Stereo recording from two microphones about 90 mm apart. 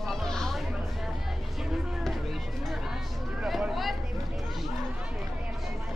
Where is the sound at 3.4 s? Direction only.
5° right (ahead or behind).